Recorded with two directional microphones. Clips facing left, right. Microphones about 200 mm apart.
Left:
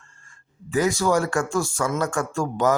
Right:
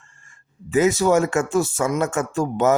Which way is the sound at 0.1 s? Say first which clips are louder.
Even; 15° right (ahead or behind).